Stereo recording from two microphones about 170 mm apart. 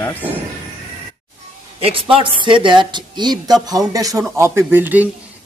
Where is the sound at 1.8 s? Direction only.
30° right (ahead or behind).